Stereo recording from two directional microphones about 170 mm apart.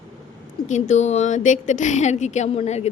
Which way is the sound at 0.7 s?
40° left (ahead or behind).